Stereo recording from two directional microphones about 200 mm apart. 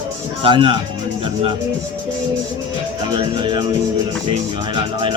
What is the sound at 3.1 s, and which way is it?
Speech, 25° right (ahead or behind).